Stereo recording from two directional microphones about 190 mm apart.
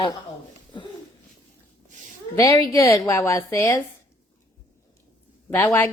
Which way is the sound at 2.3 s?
15° left (ahead or behind).